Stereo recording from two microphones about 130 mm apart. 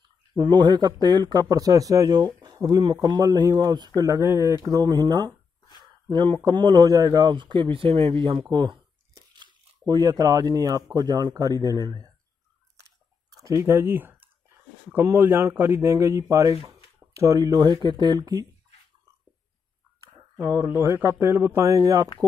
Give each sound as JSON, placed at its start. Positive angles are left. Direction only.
{"t": 0.3, "sound": "speech", "side_deg": -35}
{"t": 5.8, "sound": "a sound", "side_deg": -35}
{"t": 6.4, "sound": "speech", "side_deg": -35}
{"t": 13.3, "sound": "a sound", "side_deg": -25}
{"t": 15.0, "sound": "speech", "side_deg": -20}
{"t": 20.4, "sound": "speech", "side_deg": -25}